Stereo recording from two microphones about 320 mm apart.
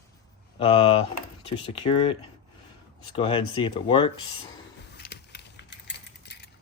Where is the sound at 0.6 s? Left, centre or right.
Centre.